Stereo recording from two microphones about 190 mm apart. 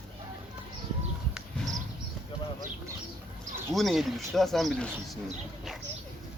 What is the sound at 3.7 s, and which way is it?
Speech, centre (ahead or behind).